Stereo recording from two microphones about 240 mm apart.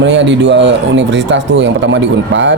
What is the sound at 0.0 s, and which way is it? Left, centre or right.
Speech, right.